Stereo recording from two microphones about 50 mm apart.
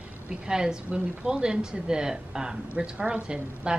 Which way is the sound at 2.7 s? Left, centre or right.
Right.